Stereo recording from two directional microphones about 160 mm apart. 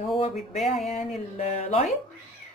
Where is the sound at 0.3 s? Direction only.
Centre (ahead or behind).